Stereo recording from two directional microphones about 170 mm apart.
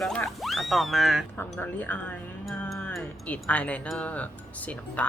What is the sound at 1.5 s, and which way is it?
Speech, 10° left (ahead or behind).